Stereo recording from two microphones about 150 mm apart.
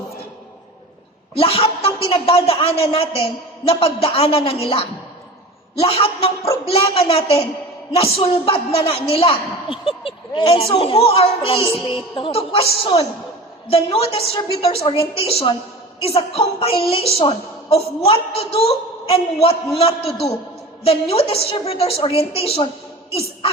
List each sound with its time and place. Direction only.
1.4 s a sound: 40° left (ahead or behind)
2.0 s a woman's voice: 40° left (ahead or behind)
20.8 s a woman's voice: 40° left (ahead or behind)